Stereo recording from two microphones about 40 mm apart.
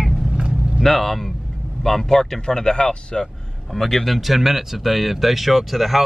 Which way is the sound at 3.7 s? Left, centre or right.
Centre.